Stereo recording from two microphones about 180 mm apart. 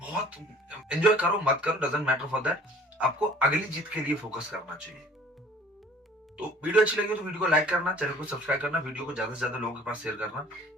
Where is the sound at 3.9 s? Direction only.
5° right (ahead or behind).